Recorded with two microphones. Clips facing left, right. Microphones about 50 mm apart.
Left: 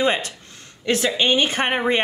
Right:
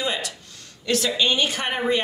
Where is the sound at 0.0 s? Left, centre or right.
Left.